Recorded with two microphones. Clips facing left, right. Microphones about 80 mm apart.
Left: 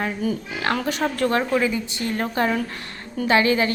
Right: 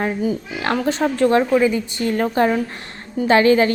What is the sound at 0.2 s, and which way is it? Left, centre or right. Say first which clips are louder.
A woman's voice: right 3 dB; right.